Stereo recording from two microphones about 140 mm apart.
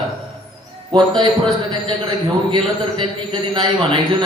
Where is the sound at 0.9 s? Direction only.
35° right (ahead or behind).